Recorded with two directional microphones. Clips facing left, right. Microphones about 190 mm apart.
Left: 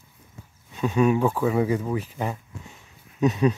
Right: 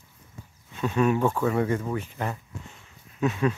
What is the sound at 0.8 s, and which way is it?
Speech, 5° left (ahead or behind).